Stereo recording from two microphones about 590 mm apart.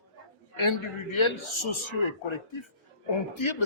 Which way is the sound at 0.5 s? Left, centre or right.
Left.